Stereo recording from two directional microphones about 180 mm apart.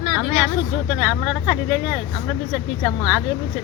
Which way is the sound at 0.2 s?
Centre (ahead or behind).